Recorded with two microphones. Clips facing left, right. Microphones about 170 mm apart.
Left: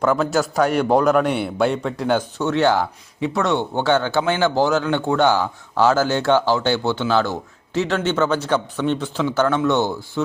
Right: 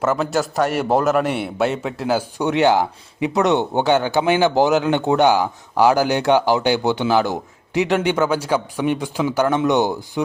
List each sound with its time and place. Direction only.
0.0 s a man's voice: centre (ahead or behind)
2.4 s speech: 15° right (ahead or behind)